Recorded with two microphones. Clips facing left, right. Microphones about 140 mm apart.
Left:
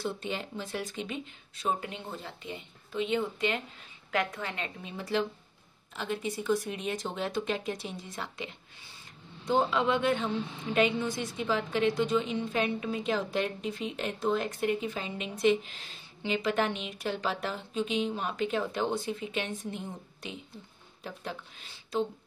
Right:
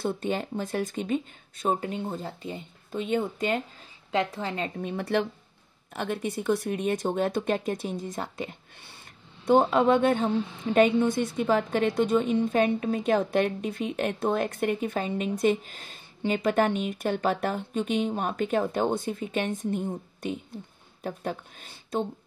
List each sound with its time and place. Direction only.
0.0 s a woman's voice: 50° right (ahead or behind)
4.1 s a woman's voice: 30° right (ahead or behind)
4.7 s a woman's voice: 60° right (ahead or behind)